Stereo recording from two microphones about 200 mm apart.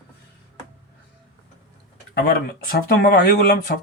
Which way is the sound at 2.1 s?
50° left (ahead or behind).